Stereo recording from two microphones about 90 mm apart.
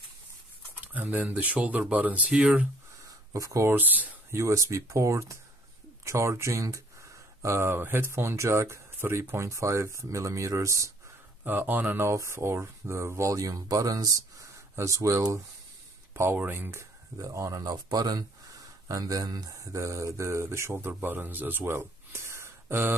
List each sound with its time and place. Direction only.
0.9 s speech: 15° right (ahead or behind)
3.3 s speech: 40° right (ahead or behind)
3.7 s speech: 20° right (ahead or behind)
4.3 s speech: 35° right (ahead or behind)
11.4 s speech: 20° right (ahead or behind)
12.1 s speech: 30° right (ahead or behind)